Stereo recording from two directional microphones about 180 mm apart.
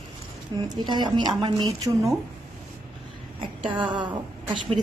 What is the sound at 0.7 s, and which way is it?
A woman's voice, 25° right (ahead or behind).